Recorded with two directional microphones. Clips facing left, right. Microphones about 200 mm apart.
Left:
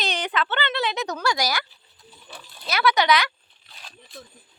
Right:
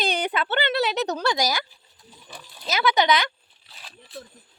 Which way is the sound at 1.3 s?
20° right (ahead or behind).